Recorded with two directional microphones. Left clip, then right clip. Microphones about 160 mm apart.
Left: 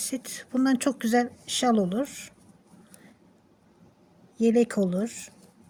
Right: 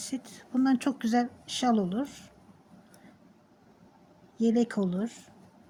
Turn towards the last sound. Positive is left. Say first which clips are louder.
# left 5 dB
turn(degrees=45)  # may be behind; listen again after turning